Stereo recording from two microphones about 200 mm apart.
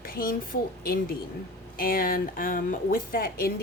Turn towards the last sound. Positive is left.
turn(degrees=45)  # may be behind; listen again after turning